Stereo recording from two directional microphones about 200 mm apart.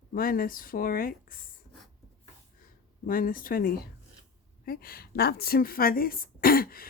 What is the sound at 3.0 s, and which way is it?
A woman's voice, 45° left (ahead or behind).